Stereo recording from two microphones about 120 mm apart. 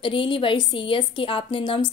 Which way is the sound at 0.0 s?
45° left (ahead or behind).